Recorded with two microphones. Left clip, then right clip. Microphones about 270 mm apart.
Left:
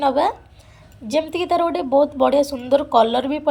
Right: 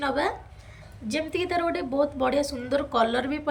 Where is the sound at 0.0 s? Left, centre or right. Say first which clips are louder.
Left 8 dB; centre.